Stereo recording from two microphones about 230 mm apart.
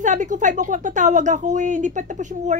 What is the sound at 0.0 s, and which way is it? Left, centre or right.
Speech, right.